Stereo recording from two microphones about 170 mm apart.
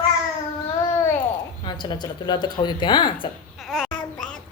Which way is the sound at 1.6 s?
25° left (ahead or behind).